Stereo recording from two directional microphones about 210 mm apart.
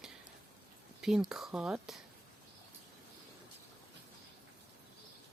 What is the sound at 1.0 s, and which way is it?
Speech, centre (ahead or behind).